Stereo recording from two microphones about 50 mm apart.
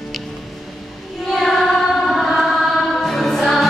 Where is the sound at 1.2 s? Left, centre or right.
Centre.